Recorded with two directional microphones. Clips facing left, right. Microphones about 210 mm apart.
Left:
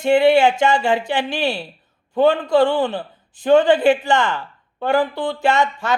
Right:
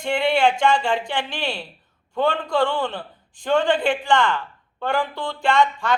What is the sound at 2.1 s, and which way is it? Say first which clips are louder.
Speech: left 7 dB; 20° left (ahead or behind).